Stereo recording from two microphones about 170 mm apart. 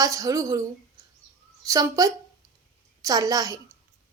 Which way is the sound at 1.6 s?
20° right (ahead or behind).